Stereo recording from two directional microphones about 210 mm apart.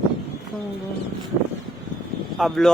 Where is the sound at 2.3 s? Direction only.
Centre (ahead or behind).